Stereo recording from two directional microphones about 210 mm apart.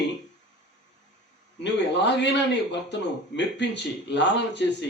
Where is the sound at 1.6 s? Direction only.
55° left (ahead or behind).